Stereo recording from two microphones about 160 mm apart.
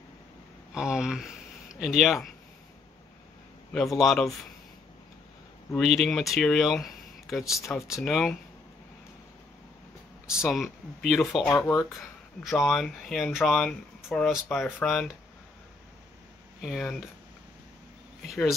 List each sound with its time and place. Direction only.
0.7 s speech: 5° right (ahead or behind)
4.0 s speech: centre (ahead or behind)
5.8 s speech: centre (ahead or behind)
10.3 s speech: centre (ahead or behind)
11.5 s speech: 15° left (ahead or behind)
12.4 s speech: centre (ahead or behind)
16.6 s speech: centre (ahead or behind)